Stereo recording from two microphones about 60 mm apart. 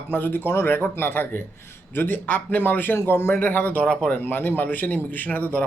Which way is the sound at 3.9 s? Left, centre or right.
Centre.